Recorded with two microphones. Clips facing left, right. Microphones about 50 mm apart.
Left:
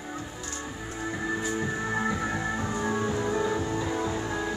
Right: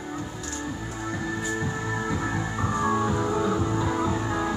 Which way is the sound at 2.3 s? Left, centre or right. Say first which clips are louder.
Right 2 dB; right.